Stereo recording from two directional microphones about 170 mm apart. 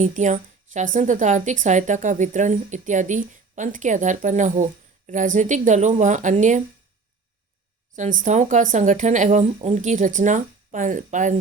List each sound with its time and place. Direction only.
0.0 s a woman's voice: 45° right (ahead or behind)
7.9 s a woman's voice: 45° right (ahead or behind)